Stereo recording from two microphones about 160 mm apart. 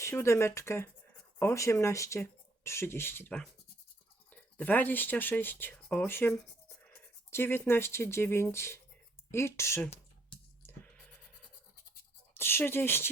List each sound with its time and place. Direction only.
0.0 s speech: 15° left (ahead or behind)
10.6 s scratch: 10° left (ahead or behind)
12.3 s speech: 15° left (ahead or behind)